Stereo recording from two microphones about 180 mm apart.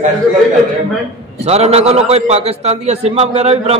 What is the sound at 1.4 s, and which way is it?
A man's voice, 35° right (ahead or behind).